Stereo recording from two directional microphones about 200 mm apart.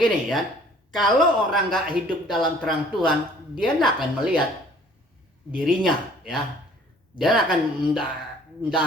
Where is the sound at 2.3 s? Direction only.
Centre (ahead or behind).